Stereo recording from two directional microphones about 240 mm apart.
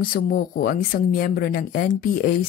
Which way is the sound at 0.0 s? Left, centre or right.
Left.